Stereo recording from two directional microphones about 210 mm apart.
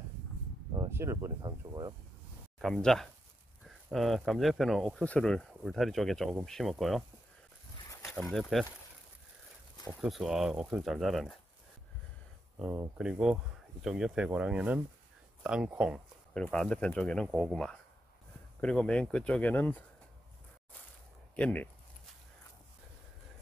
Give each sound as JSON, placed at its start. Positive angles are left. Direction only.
{"t": 0.7, "sound": "speech", "side_deg": -10}
{"t": 2.6, "sound": "speech", "side_deg": 5}
{"t": 9.8, "sound": "speech", "side_deg": 0}
{"t": 12.5, "sound": "speech", "side_deg": -10}
{"t": 21.4, "sound": "a sound", "side_deg": 5}